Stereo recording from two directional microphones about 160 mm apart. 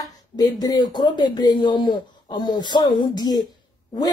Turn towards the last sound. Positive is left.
turn(degrees=25)  # may be behind; listen again after turning